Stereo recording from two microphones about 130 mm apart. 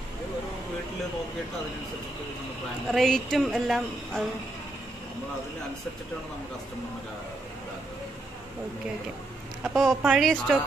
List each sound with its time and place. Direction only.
2.9 s a woman's voice: centre (ahead or behind)
9.6 s a woman's voice: 5° right (ahead or behind)